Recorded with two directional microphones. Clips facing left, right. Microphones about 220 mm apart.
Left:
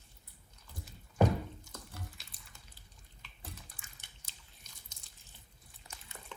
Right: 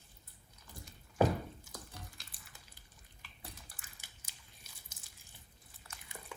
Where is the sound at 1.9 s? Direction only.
Centre (ahead or behind).